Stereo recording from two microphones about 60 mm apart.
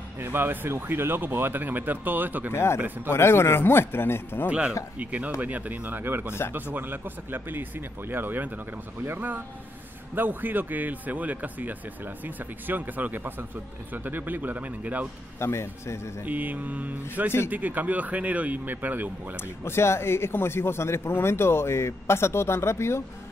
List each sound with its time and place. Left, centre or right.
0.2 s speech: right
2.5 s a man's voice: left
4.5 s speech: centre
15.3 s speech: left
16.3 s speech: right
19.6 s speech: left